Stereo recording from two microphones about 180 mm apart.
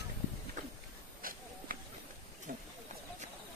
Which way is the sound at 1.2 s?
50° right (ahead or behind).